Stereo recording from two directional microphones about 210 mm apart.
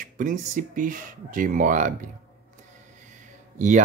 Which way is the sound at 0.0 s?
40° right (ahead or behind).